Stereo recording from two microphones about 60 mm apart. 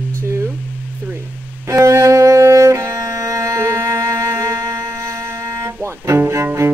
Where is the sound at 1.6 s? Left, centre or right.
Right.